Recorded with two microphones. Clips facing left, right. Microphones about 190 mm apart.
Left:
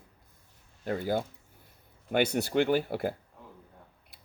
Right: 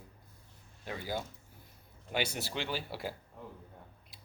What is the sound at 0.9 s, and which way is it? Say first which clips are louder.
Speech: left 8 dB; 55° left (ahead or behind).